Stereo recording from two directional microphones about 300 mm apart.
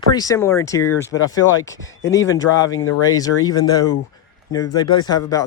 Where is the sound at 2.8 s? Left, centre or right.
Left.